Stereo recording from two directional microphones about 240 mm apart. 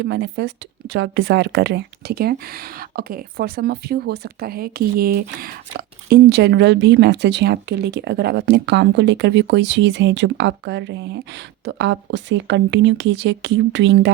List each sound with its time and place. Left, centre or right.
0.0 s speech: right